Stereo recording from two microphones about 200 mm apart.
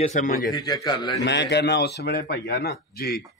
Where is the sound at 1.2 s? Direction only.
60° left (ahead or behind).